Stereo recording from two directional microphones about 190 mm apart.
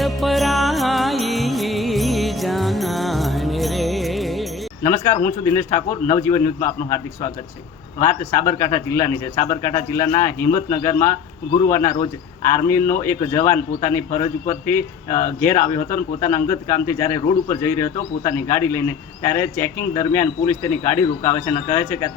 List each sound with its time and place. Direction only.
0.0 s music: centre (ahead or behind)
4.8 s speech: 15° left (ahead or behind)
8.0 s speech: 15° left (ahead or behind)